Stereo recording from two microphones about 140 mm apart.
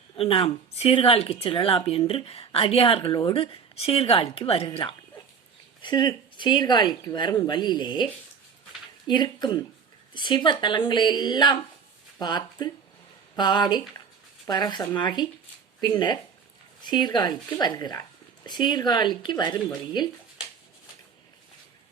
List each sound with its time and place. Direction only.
0.2 s speech: 45° left (ahead or behind)
9.0 s speech: 30° left (ahead or behind)